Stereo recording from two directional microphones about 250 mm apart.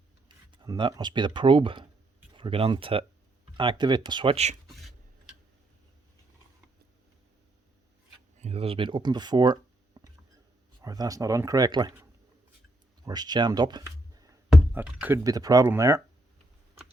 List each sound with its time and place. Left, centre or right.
0.3 s speech: centre
8.4 s speech: right
13.1 s speech: centre